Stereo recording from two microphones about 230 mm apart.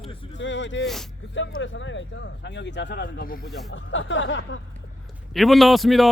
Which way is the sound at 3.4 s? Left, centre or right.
Centre.